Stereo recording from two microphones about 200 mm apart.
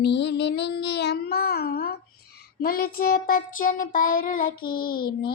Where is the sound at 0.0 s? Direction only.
60° left (ahead or behind).